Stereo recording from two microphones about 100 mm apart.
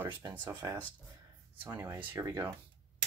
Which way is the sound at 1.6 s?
20° right (ahead or behind).